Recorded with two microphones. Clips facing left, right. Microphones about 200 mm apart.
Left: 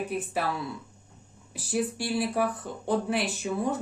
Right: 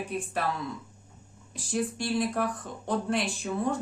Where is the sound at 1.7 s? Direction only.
5° left (ahead or behind).